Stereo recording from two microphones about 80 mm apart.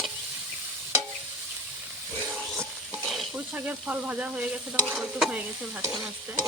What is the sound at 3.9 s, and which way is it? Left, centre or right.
Stir, centre.